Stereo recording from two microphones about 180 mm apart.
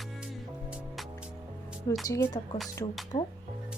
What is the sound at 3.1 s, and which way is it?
Speech, 45° left (ahead or behind).